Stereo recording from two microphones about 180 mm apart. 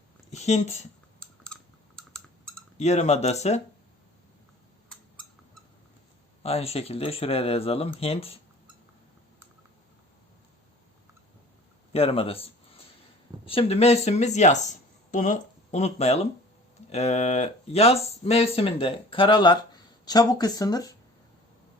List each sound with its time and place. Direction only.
0.3 s speech: 40° left (ahead or behind)
1.5 s typing: 5° left (ahead or behind)
2.0 s a sound: 5° left (ahead or behind)
2.7 s speech: 35° left (ahead or behind)
6.4 s speech: 35° left (ahead or behind)
11.9 s speech: 30° left (ahead or behind)